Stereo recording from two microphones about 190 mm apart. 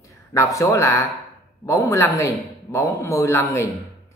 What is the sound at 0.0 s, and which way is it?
A man's voice, 15° left (ahead or behind).